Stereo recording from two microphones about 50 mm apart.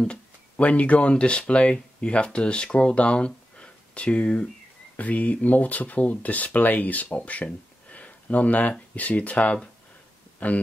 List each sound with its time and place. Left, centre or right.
0.6 s speech: left
7.9 s a sound: left
8.9 s speech: left